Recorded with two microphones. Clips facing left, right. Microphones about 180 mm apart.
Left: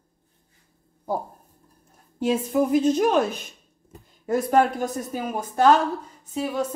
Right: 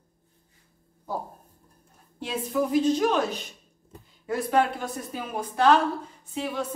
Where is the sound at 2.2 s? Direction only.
50° left (ahead or behind).